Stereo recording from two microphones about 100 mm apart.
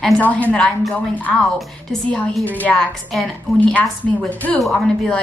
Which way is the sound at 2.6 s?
10° left (ahead or behind).